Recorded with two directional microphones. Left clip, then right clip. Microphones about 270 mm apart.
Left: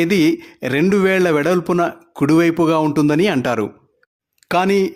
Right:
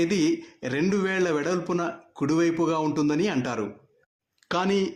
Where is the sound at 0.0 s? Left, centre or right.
Left.